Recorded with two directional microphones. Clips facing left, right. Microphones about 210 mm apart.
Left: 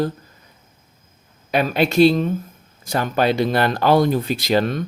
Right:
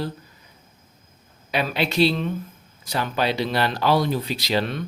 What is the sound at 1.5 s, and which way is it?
Speech, 50° left (ahead or behind).